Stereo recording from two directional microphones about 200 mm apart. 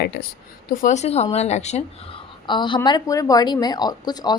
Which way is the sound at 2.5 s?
25° left (ahead or behind).